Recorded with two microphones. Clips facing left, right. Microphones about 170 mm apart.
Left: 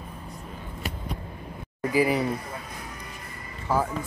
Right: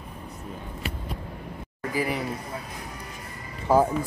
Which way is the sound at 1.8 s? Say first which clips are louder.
Left 5 dB; 10° left (ahead or behind).